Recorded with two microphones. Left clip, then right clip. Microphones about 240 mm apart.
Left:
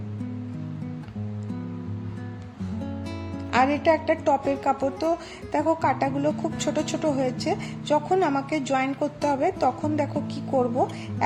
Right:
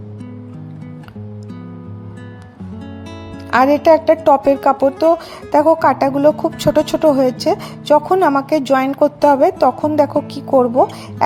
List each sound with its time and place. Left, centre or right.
3.5 s a woman's voice: right